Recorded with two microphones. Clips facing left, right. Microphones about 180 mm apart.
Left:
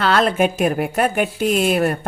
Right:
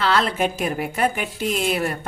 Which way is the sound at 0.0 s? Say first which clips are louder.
Left 4 dB; 50° left (ahead or behind).